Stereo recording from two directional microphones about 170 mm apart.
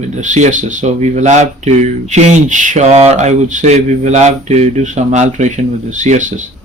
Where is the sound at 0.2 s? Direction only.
45° right (ahead or behind).